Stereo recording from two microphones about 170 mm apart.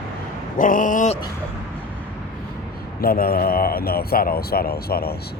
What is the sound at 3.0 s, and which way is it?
A man's voice, 60° left (ahead or behind).